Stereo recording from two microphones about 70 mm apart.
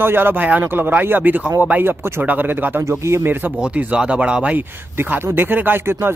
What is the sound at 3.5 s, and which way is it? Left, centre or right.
Speech, centre.